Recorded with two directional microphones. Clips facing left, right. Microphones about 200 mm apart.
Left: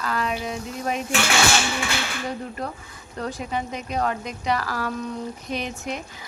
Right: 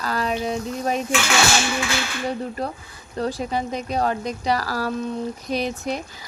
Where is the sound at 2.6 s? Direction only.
30° right (ahead or behind).